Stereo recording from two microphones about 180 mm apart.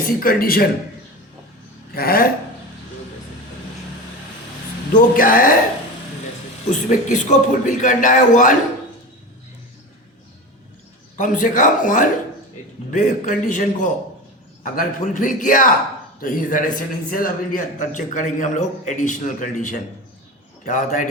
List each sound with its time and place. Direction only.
0.0 s a man's voice: 55° left (ahead or behind)
1.9 s a man's voice: 55° left (ahead or behind)
4.9 s a man's voice: 50° left (ahead or behind)
6.7 s a man's voice: 45° left (ahead or behind)
11.2 s a man's voice: 50° left (ahead or behind)